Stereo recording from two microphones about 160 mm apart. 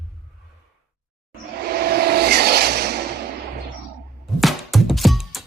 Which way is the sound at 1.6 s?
75° right (ahead or behind).